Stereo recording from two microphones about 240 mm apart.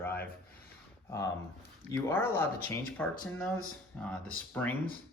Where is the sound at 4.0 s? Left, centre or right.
Centre.